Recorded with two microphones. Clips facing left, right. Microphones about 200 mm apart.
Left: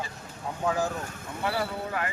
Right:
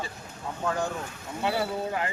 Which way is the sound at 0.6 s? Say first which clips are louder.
Left 2 dB; 5° left (ahead or behind).